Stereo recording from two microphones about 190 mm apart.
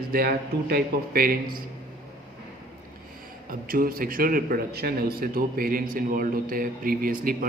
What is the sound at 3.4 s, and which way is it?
A man's voice, 50° right (ahead or behind).